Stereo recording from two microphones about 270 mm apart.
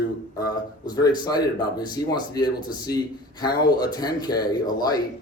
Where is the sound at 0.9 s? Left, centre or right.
Centre.